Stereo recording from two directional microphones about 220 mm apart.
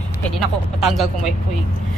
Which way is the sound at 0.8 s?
Centre (ahead or behind).